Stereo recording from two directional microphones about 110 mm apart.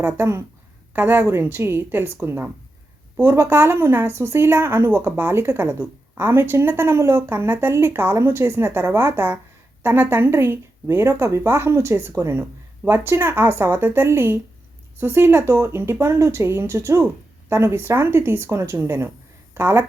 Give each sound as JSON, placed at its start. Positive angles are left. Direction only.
{"t": 0.0, "sound": "a woman's voice", "side_deg": -25}